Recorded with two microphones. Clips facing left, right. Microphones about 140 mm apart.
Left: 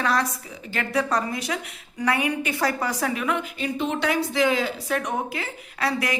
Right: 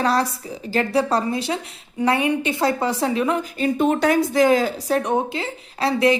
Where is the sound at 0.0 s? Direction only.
30° right (ahead or behind).